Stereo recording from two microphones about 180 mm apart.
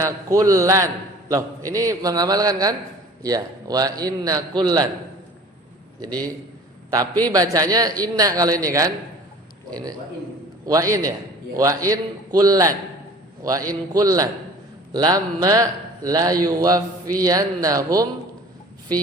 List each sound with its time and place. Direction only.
0.0 s a man's voice: 20° right (ahead or behind)
6.0 s a man's voice: 20° right (ahead or behind)
10.7 s a man's voice: 20° right (ahead or behind)